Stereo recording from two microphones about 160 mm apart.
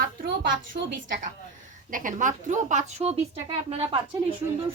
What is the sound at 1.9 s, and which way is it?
A woman's voice, 55° right (ahead or behind).